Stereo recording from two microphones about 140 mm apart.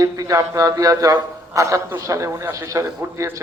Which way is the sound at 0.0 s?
25° right (ahead or behind).